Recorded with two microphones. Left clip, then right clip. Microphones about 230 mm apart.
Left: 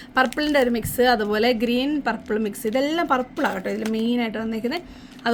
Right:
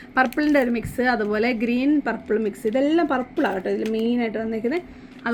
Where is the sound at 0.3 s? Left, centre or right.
Left.